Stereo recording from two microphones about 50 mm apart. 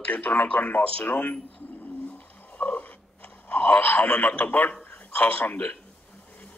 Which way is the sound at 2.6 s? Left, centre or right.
Left.